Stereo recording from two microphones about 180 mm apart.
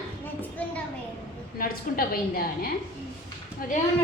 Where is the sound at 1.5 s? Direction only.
55° left (ahead or behind).